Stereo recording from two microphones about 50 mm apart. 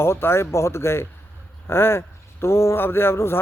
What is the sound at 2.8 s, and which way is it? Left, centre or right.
Speech, left.